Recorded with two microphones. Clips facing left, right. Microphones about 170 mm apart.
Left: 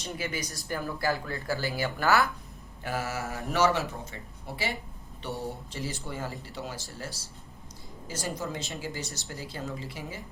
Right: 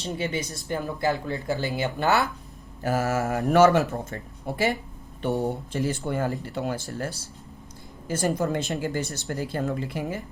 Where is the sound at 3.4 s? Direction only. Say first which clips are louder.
Right 8 dB; 55° right (ahead or behind).